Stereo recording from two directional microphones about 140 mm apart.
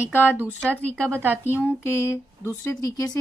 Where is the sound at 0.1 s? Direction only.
15° left (ahead or behind).